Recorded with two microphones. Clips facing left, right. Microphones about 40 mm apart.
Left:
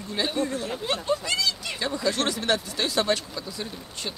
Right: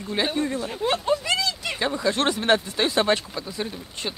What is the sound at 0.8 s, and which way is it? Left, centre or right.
Speech, centre.